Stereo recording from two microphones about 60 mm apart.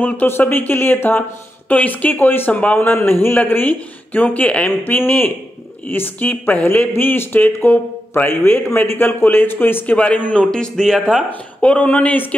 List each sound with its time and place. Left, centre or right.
0.3 s speech: left
2.9 s speech: left
9.9 s a man's voice: left; by 11.0 s centre
11.6 s speech: left